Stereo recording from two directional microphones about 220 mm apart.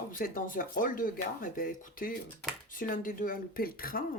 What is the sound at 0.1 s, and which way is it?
Speech, 40° left (ahead or behind).